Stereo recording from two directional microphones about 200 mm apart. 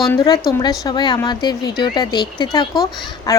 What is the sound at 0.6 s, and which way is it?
A child's voice, 20° left (ahead or behind).